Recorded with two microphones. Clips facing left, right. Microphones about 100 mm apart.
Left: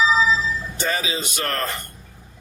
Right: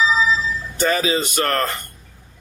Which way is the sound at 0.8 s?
50° right (ahead or behind).